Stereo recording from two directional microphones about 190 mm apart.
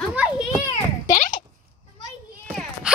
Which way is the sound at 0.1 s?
10° right (ahead or behind).